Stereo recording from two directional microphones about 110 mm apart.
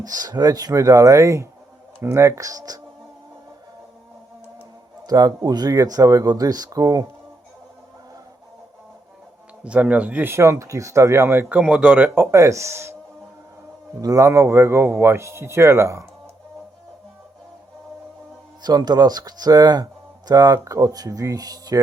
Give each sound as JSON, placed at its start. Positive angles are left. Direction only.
{"t": 0.0, "sound": "speech", "side_deg": -35}
{"t": 5.0, "sound": "speech", "side_deg": -35}
{"t": 9.6, "sound": "speech", "side_deg": -10}
{"t": 14.0, "sound": "speech", "side_deg": -30}
{"t": 18.6, "sound": "speech", "side_deg": -40}